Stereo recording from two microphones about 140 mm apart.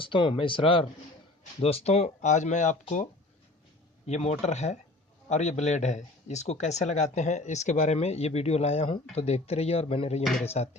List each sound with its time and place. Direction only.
0.0 s speech: 35° left (ahead or behind); by 2.7 s 60° left (ahead or behind)
4.0 s a man's voice: 50° left (ahead or behind)